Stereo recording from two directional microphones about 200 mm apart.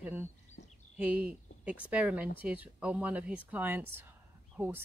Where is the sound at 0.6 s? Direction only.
60° left (ahead or behind).